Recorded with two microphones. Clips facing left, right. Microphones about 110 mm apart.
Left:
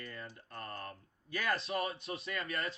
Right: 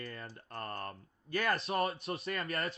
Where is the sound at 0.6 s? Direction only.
50° right (ahead or behind).